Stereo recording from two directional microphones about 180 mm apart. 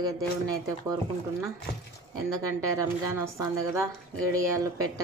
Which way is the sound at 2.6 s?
15° right (ahead or behind).